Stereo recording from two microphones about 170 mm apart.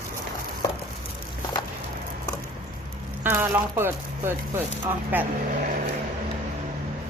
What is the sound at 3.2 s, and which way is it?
Speech, 10° right (ahead or behind).